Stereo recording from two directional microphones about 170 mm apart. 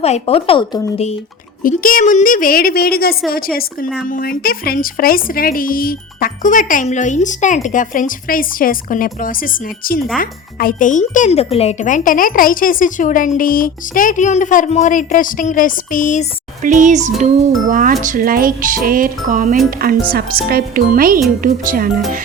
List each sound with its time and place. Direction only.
0.0 s speech: 35° left (ahead or behind)
1.6 s a child's voice: 55° left (ahead or behind)
16.6 s music: 50° right (ahead or behind)
18.0 s speech: 55° right (ahead or behind)
18.9 s music: 55° right (ahead or behind)
19.8 s speech: 60° right (ahead or behind)
21.4 s music: 55° right (ahead or behind)